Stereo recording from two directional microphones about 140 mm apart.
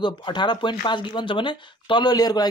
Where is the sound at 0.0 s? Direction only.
35° left (ahead or behind).